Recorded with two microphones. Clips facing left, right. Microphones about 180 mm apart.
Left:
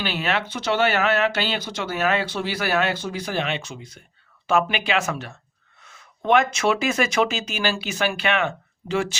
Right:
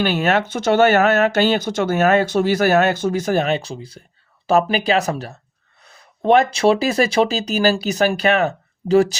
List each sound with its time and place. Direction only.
0.0 s speech: 45° right (ahead or behind)